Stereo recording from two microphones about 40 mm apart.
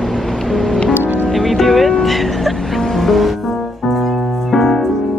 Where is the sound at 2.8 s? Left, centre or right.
Centre.